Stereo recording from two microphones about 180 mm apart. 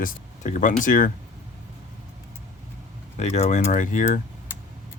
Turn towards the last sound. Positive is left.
turn(degrees=45)  # may be behind; listen again after turning